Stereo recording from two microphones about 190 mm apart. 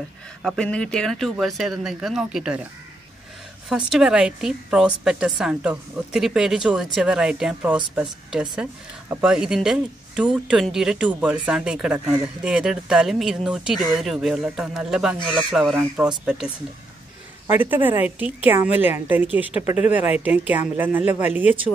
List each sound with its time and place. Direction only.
0.4 s speech: 5° left (ahead or behind)
3.9 s a woman's voice: 5° right (ahead or behind)
19.5 s speech: 35° left (ahead or behind)
19.9 s a woman's voice: 5° right (ahead or behind)